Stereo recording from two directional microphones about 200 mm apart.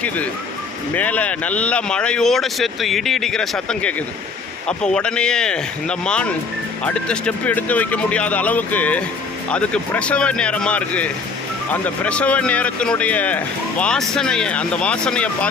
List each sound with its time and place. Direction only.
0.9 s speech: 5° left (ahead or behind)